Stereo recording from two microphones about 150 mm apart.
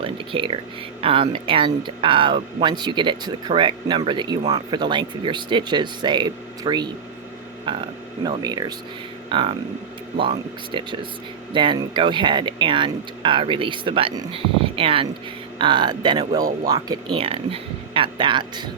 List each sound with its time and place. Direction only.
0.0 s a sound: 35° right (ahead or behind)
1.0 s speech: 35° right (ahead or behind)
8.2 s speech: 25° right (ahead or behind)
17.2 s speech: 40° right (ahead or behind)